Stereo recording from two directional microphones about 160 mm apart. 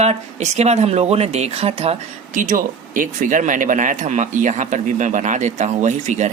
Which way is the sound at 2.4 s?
55° right (ahead or behind).